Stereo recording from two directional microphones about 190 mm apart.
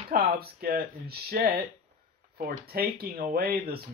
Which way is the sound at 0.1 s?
50° right (ahead or behind).